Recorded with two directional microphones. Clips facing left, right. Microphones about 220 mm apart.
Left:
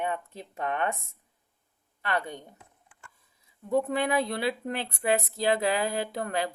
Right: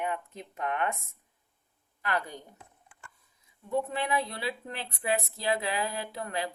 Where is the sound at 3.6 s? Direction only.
40° left (ahead or behind).